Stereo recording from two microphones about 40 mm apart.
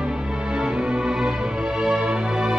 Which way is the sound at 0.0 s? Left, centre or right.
Right.